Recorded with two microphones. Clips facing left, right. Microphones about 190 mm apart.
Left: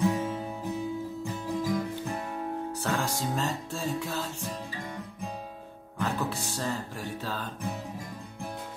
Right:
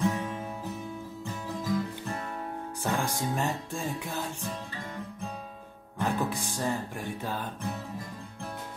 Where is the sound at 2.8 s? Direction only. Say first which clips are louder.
Right 2 dB; 15° right (ahead or behind).